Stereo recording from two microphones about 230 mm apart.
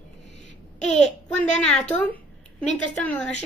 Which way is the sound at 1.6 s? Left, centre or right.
Centre.